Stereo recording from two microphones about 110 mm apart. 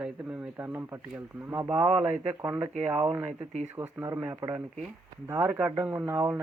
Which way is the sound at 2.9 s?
40° right (ahead or behind).